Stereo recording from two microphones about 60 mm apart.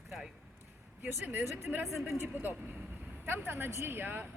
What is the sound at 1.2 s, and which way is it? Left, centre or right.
Speech, right.